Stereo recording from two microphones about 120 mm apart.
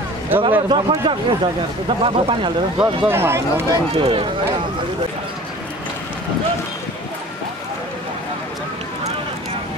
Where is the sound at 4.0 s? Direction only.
45° right (ahead or behind).